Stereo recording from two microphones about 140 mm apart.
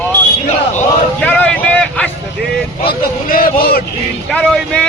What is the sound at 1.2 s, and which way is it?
Speech, 10° left (ahead or behind).